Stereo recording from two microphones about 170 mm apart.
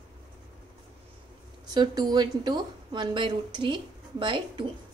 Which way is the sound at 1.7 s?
25° right (ahead or behind).